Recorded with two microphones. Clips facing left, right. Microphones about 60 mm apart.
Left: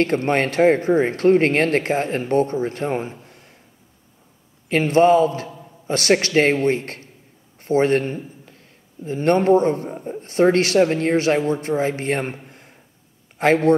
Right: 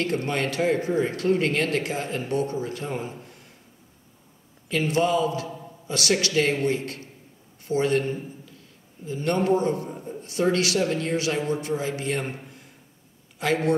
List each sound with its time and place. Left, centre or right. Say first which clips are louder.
0.0 s a man's voice: left 7 dB; left
4.6 s a man's voice: left 8 dB; left
12.4 s a sound: left 2 dB; left
13.4 s a man's voice: left 7 dB; left